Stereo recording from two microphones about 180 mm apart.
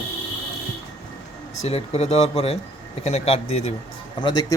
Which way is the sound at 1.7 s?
35° left (ahead or behind).